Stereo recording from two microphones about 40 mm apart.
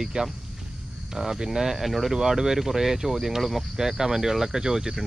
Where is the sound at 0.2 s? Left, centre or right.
Right.